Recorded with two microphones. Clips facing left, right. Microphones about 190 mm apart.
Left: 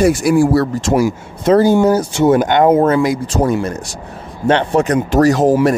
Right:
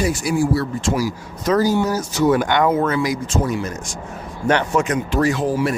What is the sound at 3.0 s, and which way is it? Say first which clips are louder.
Speech: left 6 dB; 35° left (ahead or behind).